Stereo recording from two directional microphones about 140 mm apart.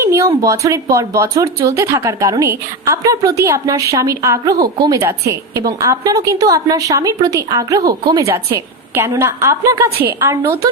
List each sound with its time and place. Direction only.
0.0 s a woman's voice: 20° right (ahead or behind)